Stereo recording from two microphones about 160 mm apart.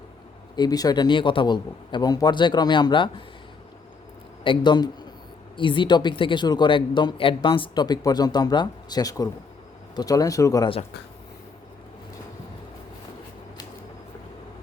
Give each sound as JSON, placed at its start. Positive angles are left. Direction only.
{"t": 0.5, "sound": "speech", "side_deg": 25}
{"t": 4.4, "sound": "speech", "side_deg": 30}